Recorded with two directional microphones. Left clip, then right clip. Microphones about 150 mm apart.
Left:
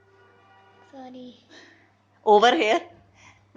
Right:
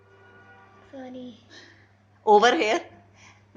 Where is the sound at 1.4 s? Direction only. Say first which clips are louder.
Right 1 dB; 40° left (ahead or behind).